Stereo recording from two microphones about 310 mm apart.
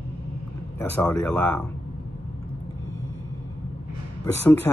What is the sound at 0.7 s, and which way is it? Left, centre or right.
Speech, centre.